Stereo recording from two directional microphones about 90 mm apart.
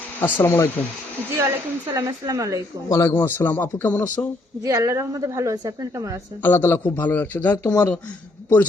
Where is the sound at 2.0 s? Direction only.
40° right (ahead or behind).